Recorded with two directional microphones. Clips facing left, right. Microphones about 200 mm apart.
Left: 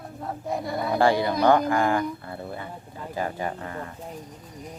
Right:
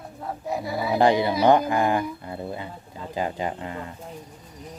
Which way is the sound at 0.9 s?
20° right (ahead or behind).